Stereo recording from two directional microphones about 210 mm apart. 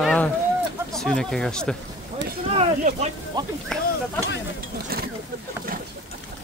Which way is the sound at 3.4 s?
20° right (ahead or behind).